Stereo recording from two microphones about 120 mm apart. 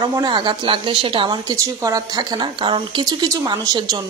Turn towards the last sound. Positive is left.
turn(degrees=-35)  # may be behind; listen again after turning